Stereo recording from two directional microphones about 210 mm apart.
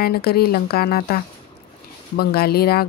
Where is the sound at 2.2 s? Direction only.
45° left (ahead or behind).